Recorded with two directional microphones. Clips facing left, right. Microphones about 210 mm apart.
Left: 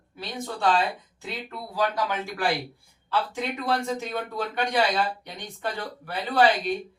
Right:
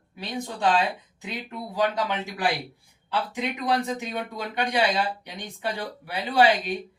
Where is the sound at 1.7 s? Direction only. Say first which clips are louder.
Right 1 dB; 20° right (ahead or behind).